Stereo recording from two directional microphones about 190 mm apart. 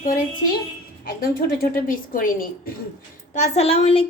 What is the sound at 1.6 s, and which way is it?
Speech, 45° left (ahead or behind).